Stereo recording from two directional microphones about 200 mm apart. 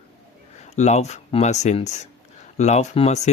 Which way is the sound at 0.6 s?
35° left (ahead or behind).